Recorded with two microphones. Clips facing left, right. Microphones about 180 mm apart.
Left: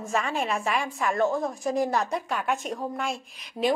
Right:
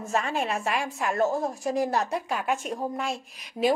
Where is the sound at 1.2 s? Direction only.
35° right (ahead or behind).